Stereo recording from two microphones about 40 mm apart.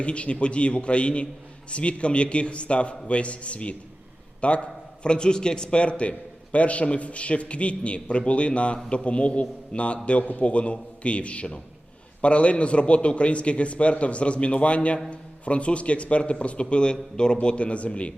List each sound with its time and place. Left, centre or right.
0.0 s a man's voice: left